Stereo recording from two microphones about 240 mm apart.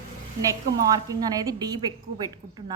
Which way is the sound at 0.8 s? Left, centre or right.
Centre.